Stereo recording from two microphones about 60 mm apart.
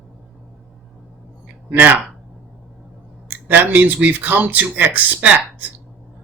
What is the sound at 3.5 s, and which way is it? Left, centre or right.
Speech, right.